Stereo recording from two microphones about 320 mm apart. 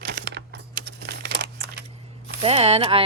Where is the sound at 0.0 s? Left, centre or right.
Right.